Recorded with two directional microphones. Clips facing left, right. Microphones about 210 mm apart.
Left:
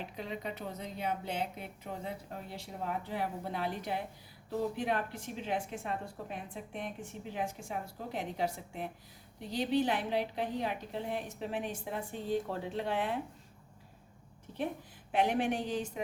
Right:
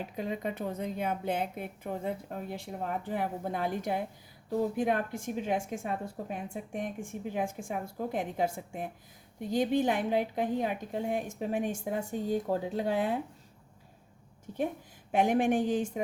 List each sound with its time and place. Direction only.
0.2 s speech: 50° right (ahead or behind)
15.1 s speech: 45° right (ahead or behind)